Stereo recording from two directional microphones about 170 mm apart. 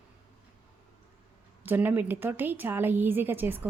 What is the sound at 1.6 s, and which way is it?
A woman's voice, 10° right (ahead or behind).